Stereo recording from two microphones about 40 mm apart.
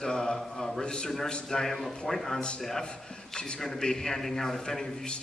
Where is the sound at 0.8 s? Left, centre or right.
Left.